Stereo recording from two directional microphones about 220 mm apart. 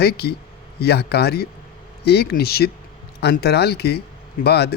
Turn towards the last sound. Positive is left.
turn(degrees=50)  # may be behind; listen again after turning